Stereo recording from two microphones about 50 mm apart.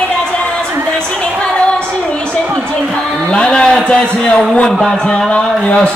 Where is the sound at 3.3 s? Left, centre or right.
Centre.